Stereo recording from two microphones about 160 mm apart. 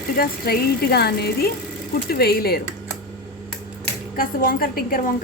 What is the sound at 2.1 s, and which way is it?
Speech, 75° left (ahead or behind).